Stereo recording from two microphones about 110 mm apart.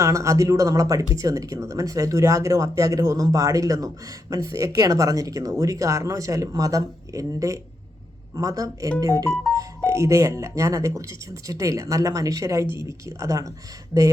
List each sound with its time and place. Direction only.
0.0 s speech: 25° right (ahead or behind)